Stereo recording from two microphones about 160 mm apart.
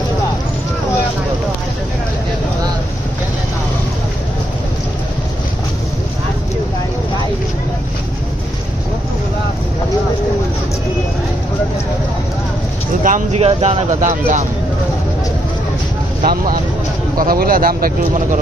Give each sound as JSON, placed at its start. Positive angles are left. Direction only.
{"t": 13.0, "sound": "vehicle", "side_deg": -50}
{"t": 17.2, "sound": "speech", "side_deg": -65}